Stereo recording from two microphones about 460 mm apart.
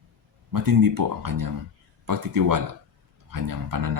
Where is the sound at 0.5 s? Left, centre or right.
Right.